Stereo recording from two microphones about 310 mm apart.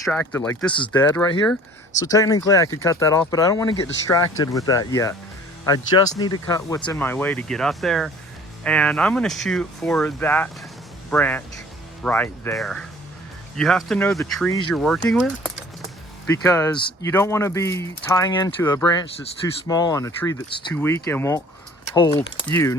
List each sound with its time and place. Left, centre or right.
0.0 s speech: centre